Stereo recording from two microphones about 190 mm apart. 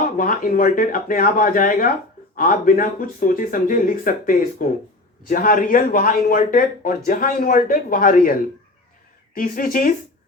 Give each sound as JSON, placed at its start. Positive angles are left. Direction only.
{"t": 0.0, "sound": "speech", "side_deg": 45}